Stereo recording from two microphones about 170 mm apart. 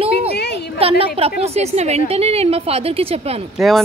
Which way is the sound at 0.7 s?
35° right (ahead or behind).